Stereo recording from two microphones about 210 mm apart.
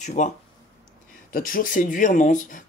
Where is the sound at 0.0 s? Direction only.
35° left (ahead or behind).